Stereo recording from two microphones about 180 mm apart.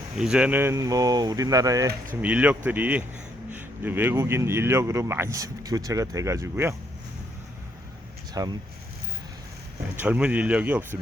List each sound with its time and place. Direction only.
0.2 s speech: 5° right (ahead or behind)
2.2 s speech: 10° right (ahead or behind)
8.3 s speech: 20° right (ahead or behind)
10.0 s speech: 5° right (ahead or behind)